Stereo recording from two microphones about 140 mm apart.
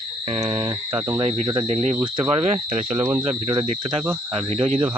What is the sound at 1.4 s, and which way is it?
Speech, 30° right (ahead or behind).